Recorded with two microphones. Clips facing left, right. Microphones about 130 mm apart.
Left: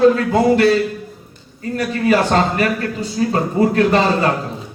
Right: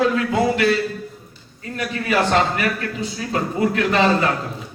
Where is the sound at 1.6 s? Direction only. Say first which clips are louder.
Left 6 dB; 35° left (ahead or behind).